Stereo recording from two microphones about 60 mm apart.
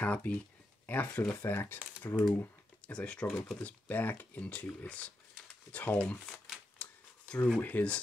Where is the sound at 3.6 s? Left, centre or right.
Left.